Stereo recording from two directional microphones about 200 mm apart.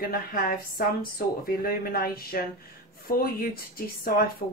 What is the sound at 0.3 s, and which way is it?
Speech, 45° left (ahead or behind).